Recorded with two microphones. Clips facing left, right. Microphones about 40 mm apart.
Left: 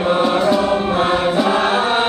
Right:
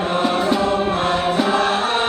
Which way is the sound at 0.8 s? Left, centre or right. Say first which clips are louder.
Left 2 dB; centre.